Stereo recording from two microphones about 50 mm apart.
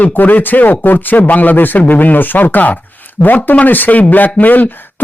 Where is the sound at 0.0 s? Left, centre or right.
Left.